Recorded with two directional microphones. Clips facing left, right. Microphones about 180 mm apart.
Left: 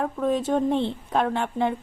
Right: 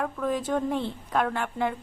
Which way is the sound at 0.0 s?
25° left (ahead or behind).